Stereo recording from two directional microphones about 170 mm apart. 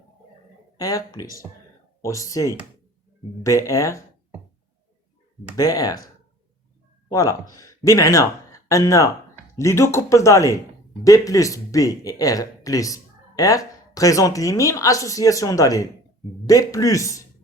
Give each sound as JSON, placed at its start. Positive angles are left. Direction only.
{"t": 0.8, "sound": "speech", "side_deg": 20}
{"t": 5.5, "sound": "speech", "side_deg": 20}
{"t": 7.1, "sound": "speech", "side_deg": 20}